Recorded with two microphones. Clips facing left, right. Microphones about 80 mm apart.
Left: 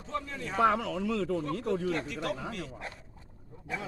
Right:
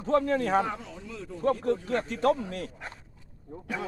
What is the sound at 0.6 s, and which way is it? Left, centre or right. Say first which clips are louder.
Speech: left 7 dB; left.